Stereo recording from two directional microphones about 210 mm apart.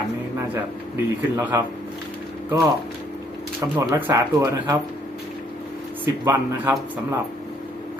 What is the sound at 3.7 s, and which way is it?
Speech, 15° right (ahead or behind).